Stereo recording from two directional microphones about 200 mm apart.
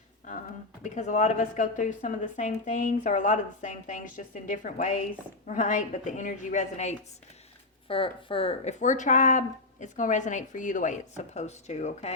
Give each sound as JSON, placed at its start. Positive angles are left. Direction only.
{"t": 0.8, "sound": "speech", "side_deg": 35}